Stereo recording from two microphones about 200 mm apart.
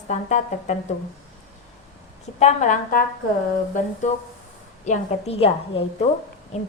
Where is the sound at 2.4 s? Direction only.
35° left (ahead or behind).